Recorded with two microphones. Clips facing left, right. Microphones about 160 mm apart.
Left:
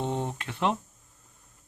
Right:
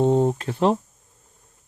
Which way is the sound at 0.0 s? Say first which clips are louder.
Right 12 dB; 40° right (ahead or behind).